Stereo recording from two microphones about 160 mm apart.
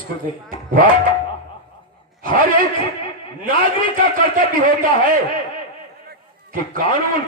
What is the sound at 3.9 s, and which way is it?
Speech, 60° right (ahead or behind).